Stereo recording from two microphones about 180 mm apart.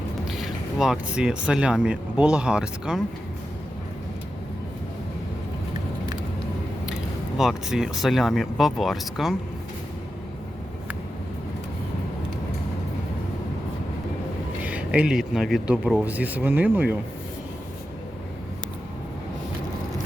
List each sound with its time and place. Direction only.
0.3 s speech: centre (ahead or behind)
7.3 s speech: centre (ahead or behind)
14.6 s speech: 10° right (ahead or behind)